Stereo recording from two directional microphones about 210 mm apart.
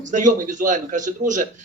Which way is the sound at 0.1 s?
35° right (ahead or behind).